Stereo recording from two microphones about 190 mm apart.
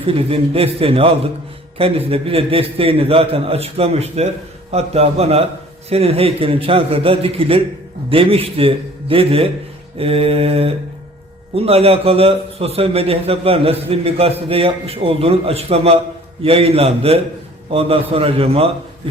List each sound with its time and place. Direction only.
0.0 s a man's voice: 30° right (ahead or behind)